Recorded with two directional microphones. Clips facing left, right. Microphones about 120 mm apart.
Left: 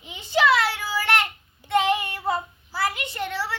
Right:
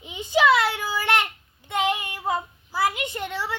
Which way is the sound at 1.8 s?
15° right (ahead or behind).